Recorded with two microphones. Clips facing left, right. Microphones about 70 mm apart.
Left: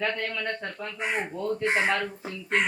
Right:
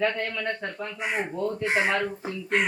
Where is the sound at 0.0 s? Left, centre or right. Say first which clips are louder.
Right 3 dB; centre.